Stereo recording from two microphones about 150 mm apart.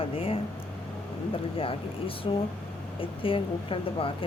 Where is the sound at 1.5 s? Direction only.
35° left (ahead or behind).